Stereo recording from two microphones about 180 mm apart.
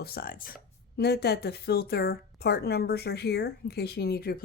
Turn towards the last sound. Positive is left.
turn(degrees=60)  # may be behind; listen again after turning